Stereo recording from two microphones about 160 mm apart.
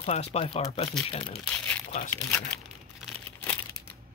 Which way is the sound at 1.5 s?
10° left (ahead or behind).